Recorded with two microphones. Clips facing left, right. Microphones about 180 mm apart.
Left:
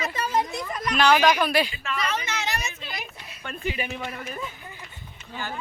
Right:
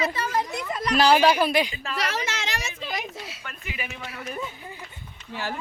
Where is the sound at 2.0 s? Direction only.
90° right.